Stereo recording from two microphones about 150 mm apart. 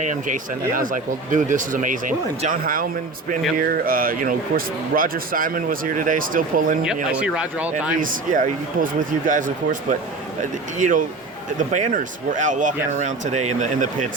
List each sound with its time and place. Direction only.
0.0 s a man's voice: 55° right (ahead or behind)
6.8 s speech: 5° right (ahead or behind)
8.0 s speech: 65° right (ahead or behind)
10.8 s speech: 55° right (ahead or behind)